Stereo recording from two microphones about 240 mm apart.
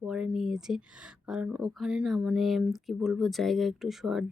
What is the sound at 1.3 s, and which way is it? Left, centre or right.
Speech, centre.